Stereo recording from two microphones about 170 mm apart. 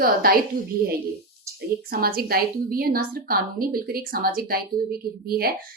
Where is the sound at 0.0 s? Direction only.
60° right (ahead or behind).